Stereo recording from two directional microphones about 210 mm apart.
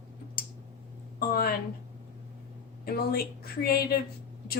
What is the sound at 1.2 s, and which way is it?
Speech, 45° left (ahead or behind).